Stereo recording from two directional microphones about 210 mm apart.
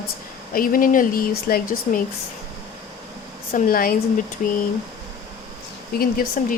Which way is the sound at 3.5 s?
40° left (ahead or behind).